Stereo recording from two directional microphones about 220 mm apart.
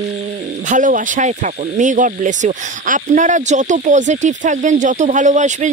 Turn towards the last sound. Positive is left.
turn(degrees=-35)  # may be behind; listen again after turning